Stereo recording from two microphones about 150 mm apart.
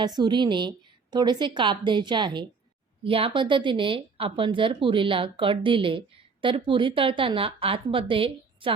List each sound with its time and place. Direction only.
0.0 s a woman's voice: 30° right (ahead or behind)